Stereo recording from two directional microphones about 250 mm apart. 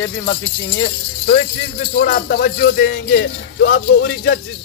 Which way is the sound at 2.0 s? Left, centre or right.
Left.